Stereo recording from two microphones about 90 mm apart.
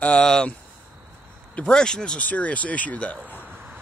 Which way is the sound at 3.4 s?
20° right (ahead or behind).